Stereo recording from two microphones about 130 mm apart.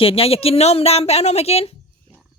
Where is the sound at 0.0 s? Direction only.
50° left (ahead or behind).